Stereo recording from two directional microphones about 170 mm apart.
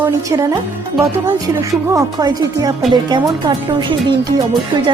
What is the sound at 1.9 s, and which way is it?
Speech, 20° right (ahead or behind).